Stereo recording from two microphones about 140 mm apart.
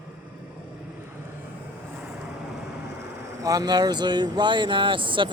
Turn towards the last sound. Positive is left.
turn(degrees=-35)  # may be behind; listen again after turning